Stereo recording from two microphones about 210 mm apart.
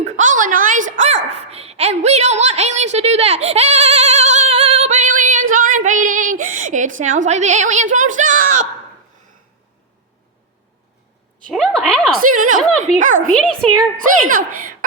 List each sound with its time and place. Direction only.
0.0 s a sound: 35° right (ahead or behind)
6.4 s a woman's voice: 40° right (ahead or behind)
11.4 s a woman's voice: centre (ahead or behind)
12.2 s a woman's voice: 40° right (ahead or behind)
13.3 s a woman's voice: 5° left (ahead or behind)
13.9 s a woman's voice: 40° right (ahead or behind)